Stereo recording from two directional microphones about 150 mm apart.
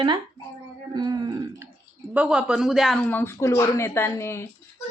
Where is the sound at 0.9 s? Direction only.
30° right (ahead or behind).